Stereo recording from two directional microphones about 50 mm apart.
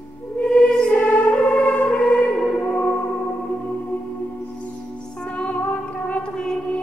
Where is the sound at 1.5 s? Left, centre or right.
Centre.